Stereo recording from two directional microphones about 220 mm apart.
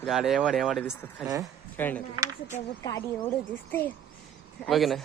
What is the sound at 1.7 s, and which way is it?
A man's voice, 10° left (ahead or behind).